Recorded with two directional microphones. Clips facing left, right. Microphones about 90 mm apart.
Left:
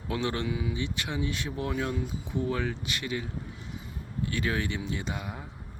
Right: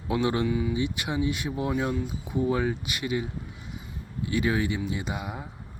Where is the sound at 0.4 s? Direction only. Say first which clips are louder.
Right 5 dB; 5° left (ahead or behind).